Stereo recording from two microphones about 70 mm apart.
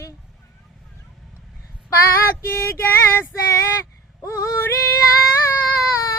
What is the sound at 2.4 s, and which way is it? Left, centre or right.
Female singing, left.